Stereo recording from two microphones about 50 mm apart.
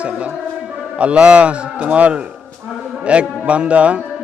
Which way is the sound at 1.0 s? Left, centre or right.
Right.